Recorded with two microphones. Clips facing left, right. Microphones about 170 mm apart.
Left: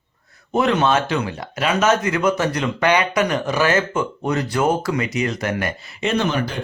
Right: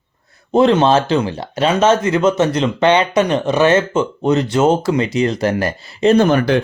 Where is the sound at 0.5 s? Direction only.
30° right (ahead or behind).